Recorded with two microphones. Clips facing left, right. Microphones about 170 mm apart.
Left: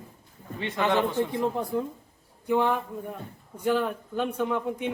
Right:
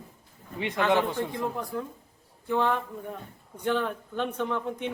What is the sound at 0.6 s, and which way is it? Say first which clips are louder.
Speech: right 1 dB; 15° right (ahead or behind).